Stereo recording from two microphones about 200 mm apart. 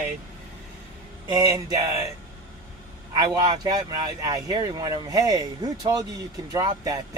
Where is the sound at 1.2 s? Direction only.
20° right (ahead or behind).